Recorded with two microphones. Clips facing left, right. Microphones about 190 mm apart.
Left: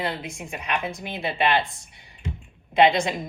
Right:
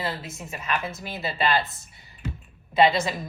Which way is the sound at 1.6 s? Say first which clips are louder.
Left 2 dB; 5° right (ahead or behind).